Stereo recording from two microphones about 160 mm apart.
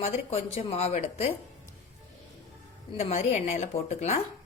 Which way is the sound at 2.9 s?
40° left (ahead or behind).